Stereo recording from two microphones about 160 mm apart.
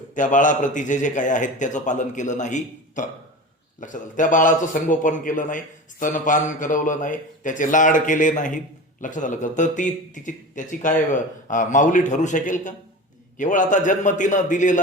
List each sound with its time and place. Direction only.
0.1 s a man's voice: 50° left (ahead or behind)